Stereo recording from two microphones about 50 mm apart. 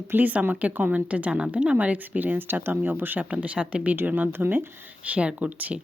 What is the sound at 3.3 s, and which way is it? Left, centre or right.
Speech, right.